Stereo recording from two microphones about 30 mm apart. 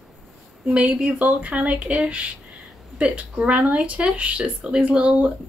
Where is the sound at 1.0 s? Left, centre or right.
Right.